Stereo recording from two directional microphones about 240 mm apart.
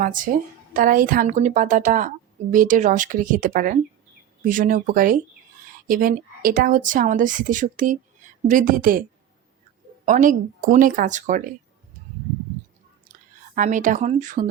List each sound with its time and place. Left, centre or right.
0.0 s a woman's voice: right
10.1 s speech: right
13.6 s speech: right